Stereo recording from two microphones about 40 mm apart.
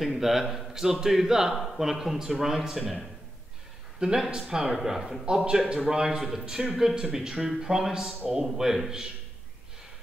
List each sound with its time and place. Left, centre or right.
0.1 s speech: centre
4.0 s speech: right; by 5.2 s centre
5.2 s speech: centre